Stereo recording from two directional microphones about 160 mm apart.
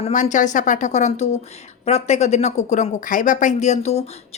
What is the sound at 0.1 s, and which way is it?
A woman's voice, 50° left (ahead or behind).